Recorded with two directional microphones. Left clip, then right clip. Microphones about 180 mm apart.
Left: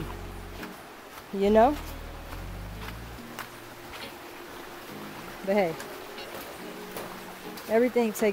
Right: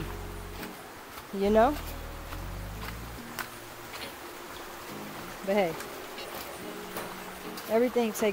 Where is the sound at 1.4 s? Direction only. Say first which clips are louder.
Left 3 dB; 20° left (ahead or behind).